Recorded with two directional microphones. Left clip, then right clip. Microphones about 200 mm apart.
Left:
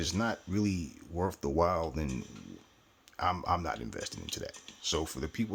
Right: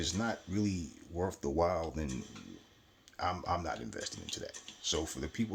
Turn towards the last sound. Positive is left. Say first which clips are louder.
# left 2 dB
turn(degrees=45)  # may be behind; listen again after turning